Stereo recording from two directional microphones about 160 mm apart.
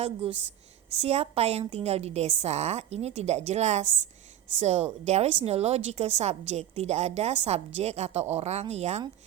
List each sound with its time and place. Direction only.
0.9 s a woman's voice: 40° right (ahead or behind)